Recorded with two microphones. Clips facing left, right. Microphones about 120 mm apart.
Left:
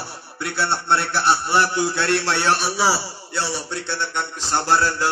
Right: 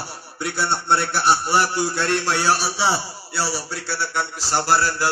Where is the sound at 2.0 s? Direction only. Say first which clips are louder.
Left 1 dB; 40° right (ahead or behind).